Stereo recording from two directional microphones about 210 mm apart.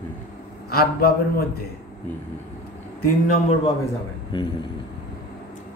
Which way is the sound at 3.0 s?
35° left (ahead or behind).